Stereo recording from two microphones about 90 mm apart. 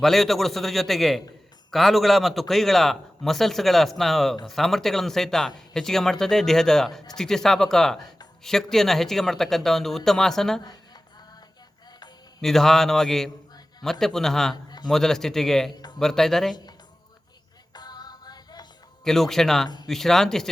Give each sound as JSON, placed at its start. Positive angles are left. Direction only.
{"t": 0.0, "sound": "a man's voice", "side_deg": 0}
{"t": 12.4, "sound": "a man's voice", "side_deg": 5}
{"t": 14.5, "sound": "a sound", "side_deg": 50}
{"t": 14.8, "sound": "a man's voice", "side_deg": 5}
{"t": 15.7, "sound": "a sound", "side_deg": 50}
{"t": 16.0, "sound": "a man's voice", "side_deg": 5}
{"t": 17.7, "sound": "music", "side_deg": 50}
{"t": 19.0, "sound": "a man's voice", "side_deg": 5}
{"t": 19.6, "sound": "speech", "side_deg": 50}
{"t": 19.9, "sound": "a man's voice", "side_deg": 5}